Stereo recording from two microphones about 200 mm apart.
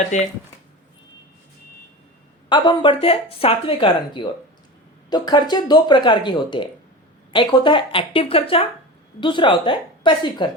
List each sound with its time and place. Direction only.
0.1 s speech: 35° left (ahead or behind)
2.5 s speech: 25° left (ahead or behind)